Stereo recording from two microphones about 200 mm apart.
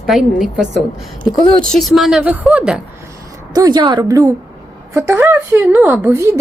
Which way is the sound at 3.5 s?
20° right (ahead or behind).